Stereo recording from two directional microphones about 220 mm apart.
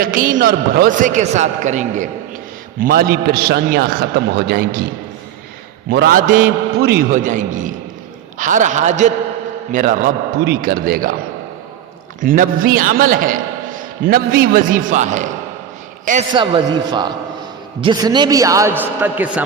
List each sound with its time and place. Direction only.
0.0 s a man's voice: 40° right (ahead or behind)
5.9 s a man's voice: 45° right (ahead or behind)
12.2 s a man's voice: 40° right (ahead or behind)
16.3 s a man's voice: 20° right (ahead or behind)